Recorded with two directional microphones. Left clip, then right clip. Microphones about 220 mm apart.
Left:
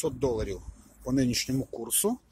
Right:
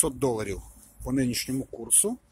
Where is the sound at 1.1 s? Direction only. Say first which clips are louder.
Even; centre (ahead or behind).